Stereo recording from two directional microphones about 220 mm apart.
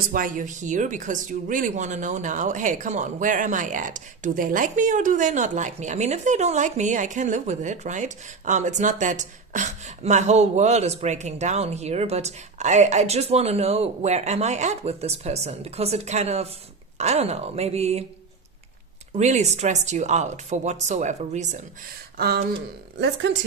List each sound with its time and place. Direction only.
0.0 s speech: 40° right (ahead or behind)
19.1 s speech: 30° right (ahead or behind)
22.1 s a woman's voice: 45° right (ahead or behind)